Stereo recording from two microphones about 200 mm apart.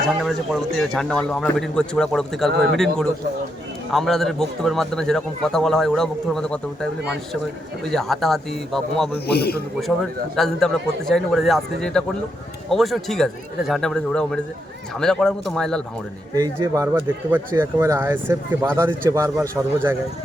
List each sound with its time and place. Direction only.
0.2 s a man's voice: centre (ahead or behind)
7.9 s a man's voice: centre (ahead or behind)
9.2 s speech: 55° left (ahead or behind)
10.3 s a man's voice: centre (ahead or behind)
16.3 s speech: 15° right (ahead or behind)